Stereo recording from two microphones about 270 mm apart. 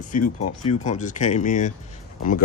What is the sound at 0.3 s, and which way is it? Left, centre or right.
Speech, left.